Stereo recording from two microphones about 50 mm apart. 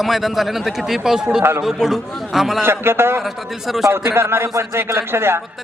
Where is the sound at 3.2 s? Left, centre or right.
Centre.